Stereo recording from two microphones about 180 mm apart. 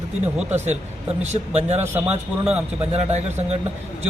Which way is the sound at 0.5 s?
40° right (ahead or behind).